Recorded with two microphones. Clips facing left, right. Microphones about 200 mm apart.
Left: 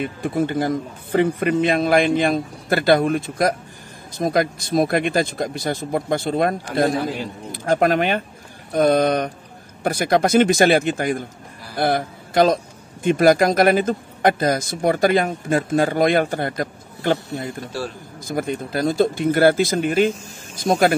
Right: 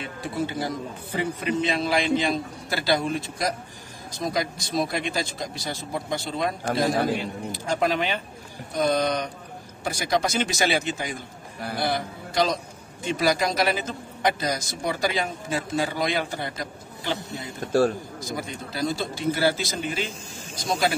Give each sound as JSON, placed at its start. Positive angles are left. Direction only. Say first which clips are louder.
{"t": 0.0, "sound": "a man's voice", "louder": "left 7 dB", "side_deg": 55}
{"t": 17.7, "sound": "speech", "louder": "right 10 dB", "side_deg": -50}
{"t": 18.3, "sound": "a man's voice", "louder": "left 10 dB", "side_deg": 55}